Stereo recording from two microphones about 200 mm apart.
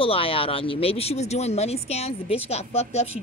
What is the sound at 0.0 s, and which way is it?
Speech, 30° left (ahead or behind).